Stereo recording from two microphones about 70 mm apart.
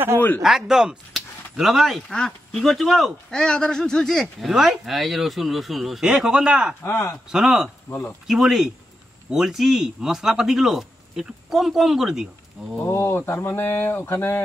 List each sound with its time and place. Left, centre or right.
0.4 s speech: centre
3.3 s speech: centre
6.8 s speech: left
7.2 s speech: centre
12.8 s speech: left